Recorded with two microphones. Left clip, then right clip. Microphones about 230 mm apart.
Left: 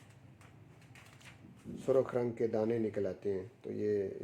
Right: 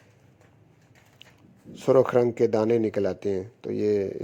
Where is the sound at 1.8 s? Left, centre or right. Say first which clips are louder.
Right 12 dB; right.